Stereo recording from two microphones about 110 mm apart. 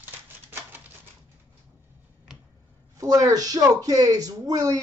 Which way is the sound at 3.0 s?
30° right (ahead or behind).